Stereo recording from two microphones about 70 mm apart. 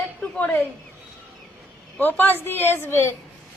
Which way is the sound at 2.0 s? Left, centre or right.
Left.